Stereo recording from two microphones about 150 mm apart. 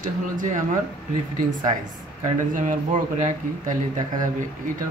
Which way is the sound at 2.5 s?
60° right (ahead or behind).